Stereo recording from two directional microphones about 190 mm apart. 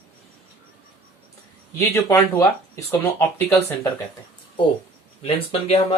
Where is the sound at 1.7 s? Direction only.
15° left (ahead or behind).